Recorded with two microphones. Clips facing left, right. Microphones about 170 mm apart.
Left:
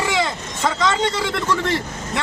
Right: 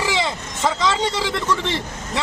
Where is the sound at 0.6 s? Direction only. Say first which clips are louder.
Left 1 dB; centre (ahead or behind).